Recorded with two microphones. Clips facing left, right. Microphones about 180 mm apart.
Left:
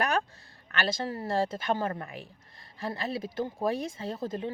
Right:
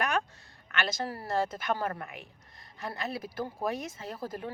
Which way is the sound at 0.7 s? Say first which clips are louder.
Left 2 dB; 30° left (ahead or behind).